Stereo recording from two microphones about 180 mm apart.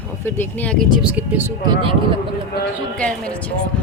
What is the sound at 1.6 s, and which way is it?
Speech, 30° right (ahead or behind).